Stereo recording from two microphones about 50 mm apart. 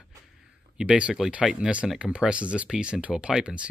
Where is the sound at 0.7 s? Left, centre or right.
Right.